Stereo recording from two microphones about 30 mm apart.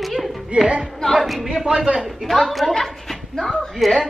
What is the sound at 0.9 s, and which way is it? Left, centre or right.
Speech, left.